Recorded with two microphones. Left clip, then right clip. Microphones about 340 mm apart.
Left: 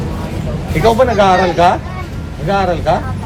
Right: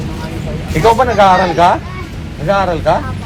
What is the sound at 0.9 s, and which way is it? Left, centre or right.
Speech, centre.